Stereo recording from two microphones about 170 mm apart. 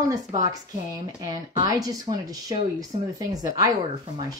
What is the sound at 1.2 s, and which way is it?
Speech, 20° right (ahead or behind).